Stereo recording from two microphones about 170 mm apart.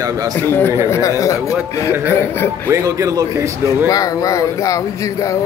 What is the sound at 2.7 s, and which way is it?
Speech, 15° right (ahead or behind).